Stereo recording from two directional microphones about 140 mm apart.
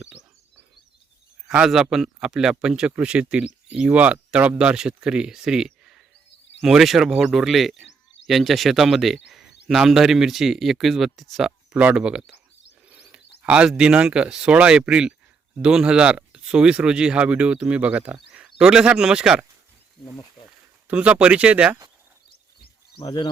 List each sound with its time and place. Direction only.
1.5 s a man's voice: 5° right (ahead or behind)
20.8 s speech: 10° right (ahead or behind)
23.0 s speech: 30° left (ahead or behind)